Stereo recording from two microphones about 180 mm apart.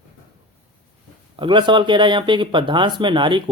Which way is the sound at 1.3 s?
25° right (ahead or behind).